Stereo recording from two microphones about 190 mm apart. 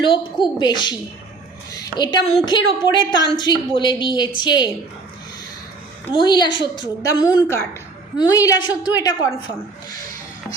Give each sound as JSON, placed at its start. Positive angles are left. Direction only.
{"t": 0.0, "sound": "a woman's voice", "side_deg": 25}
{"t": 6.1, "sound": "a woman's voice", "side_deg": 25}
{"t": 7.4, "sound": "a woman's voice", "side_deg": 10}